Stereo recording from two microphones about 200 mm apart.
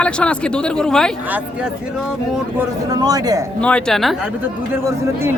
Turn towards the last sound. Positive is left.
turn(degrees=0)  # may be behind; listen again after turning